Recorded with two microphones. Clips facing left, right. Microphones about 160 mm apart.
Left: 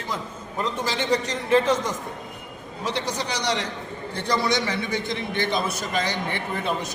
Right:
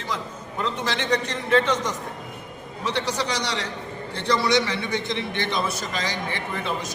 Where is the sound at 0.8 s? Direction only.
5° left (ahead or behind).